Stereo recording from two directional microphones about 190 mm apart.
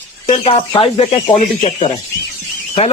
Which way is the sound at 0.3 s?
30° left (ahead or behind).